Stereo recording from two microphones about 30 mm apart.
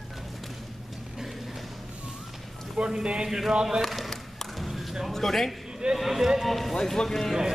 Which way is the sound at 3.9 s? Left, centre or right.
Centre.